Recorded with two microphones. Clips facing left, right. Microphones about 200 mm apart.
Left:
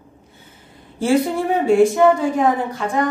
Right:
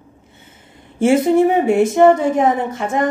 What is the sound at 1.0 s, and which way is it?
A woman's voice, 20° right (ahead or behind).